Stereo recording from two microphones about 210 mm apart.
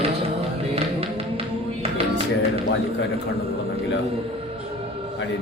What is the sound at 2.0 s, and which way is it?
Music, 30° right (ahead or behind).